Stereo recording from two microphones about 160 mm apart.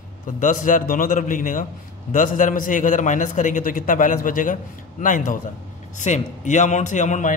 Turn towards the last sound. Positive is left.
turn(degrees=50)  # may be behind; listen again after turning